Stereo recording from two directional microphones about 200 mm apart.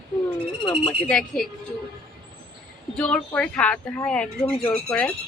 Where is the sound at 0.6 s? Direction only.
25° left (ahead or behind).